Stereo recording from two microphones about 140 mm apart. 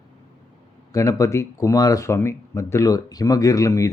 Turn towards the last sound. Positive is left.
turn(degrees=25)  # may be behind; listen again after turning